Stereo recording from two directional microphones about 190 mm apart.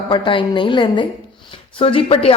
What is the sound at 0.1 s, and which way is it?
A woman's voice, 25° left (ahead or behind).